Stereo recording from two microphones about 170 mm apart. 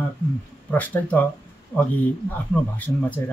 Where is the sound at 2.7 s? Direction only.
10° left (ahead or behind).